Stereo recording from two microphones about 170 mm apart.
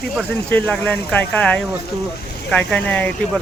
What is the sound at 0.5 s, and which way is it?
Speech, 5° left (ahead or behind).